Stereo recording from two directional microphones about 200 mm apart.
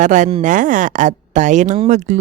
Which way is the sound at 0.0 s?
40° right (ahead or behind).